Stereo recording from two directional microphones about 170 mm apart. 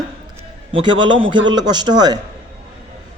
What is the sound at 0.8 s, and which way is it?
A man's voice, 30° right (ahead or behind).